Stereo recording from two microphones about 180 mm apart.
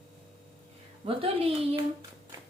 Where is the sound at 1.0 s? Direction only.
30° right (ahead or behind).